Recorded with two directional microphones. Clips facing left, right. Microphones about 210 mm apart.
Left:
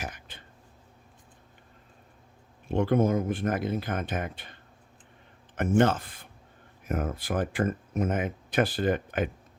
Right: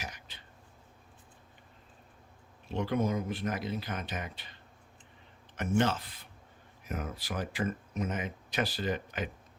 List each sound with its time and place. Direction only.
0.0 s throat clearing: 50° left (ahead or behind)
2.6 s speech: 50° left (ahead or behind)